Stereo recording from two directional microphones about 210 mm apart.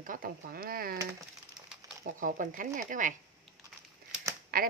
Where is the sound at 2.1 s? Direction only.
40° right (ahead or behind).